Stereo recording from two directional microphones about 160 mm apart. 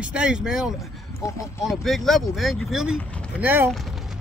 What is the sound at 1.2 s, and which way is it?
Speech, 20° left (ahead or behind).